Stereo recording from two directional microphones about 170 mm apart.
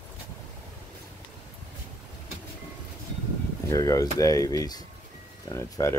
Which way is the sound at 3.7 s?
20° left (ahead or behind).